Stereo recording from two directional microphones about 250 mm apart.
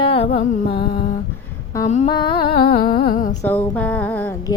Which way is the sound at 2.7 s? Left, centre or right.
Left.